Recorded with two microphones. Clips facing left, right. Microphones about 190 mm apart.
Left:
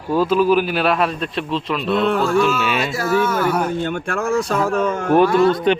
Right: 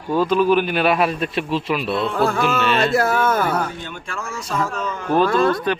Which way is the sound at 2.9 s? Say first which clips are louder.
Right 1 dB; 55° right (ahead or behind).